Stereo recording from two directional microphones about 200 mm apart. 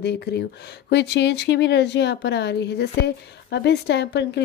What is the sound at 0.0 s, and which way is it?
Speech, 55° left (ahead or behind).